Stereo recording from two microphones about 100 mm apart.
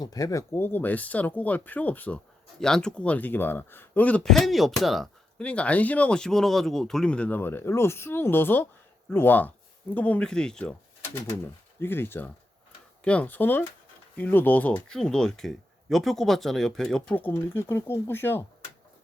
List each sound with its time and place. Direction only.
0.0 s speech: 40° left (ahead or behind)
0.6 s speech: 20° left (ahead or behind)
4.3 s speech: centre (ahead or behind)
5.4 s speech: 15° left (ahead or behind)
11.0 s speech: 20° left (ahead or behind); by 17.2 s 5° left (ahead or behind)
17.2 s speech: 20° left (ahead or behind)